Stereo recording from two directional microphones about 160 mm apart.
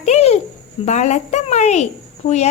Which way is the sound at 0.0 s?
40° left (ahead or behind).